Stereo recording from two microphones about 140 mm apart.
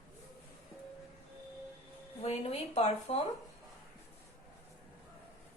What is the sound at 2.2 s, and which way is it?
A woman's voice, 50° left (ahead or behind).